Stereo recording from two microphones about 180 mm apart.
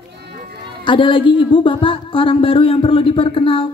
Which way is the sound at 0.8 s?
25° left (ahead or behind).